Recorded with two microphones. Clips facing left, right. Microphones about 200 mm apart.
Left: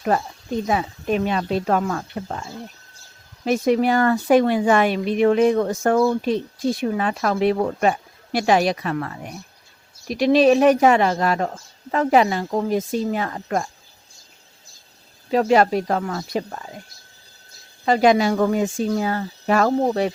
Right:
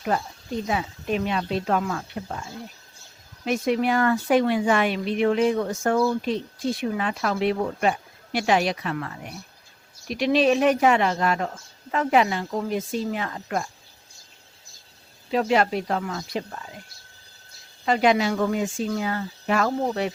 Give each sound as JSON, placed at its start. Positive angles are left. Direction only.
{"t": 0.7, "sound": "speech", "side_deg": 45}
{"t": 3.4, "sound": "speech", "side_deg": 40}
{"t": 15.3, "sound": "speech", "side_deg": 45}
{"t": 17.8, "sound": "speech", "side_deg": 40}